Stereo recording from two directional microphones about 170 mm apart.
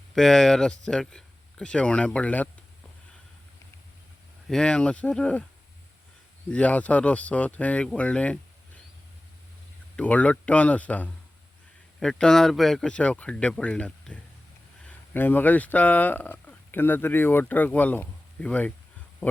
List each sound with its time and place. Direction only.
0.1 s speech: centre (ahead or behind)
4.4 s speech: 5° left (ahead or behind)
6.5 s speech: 10° left (ahead or behind)
9.9 s speech: 10° left (ahead or behind)